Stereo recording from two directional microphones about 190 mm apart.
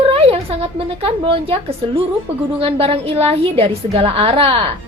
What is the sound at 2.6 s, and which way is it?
A woman's voice, 30° right (ahead or behind).